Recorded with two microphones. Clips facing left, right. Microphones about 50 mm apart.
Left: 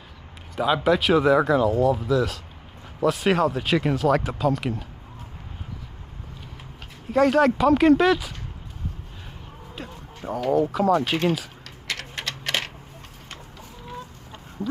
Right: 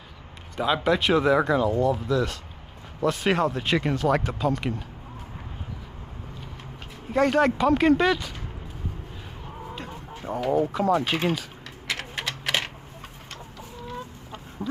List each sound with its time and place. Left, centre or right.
0.6 s speech: centre
7.1 s speech: centre
10.3 s speech: centre
11.9 s typewriter: centre
14.6 s chicken: centre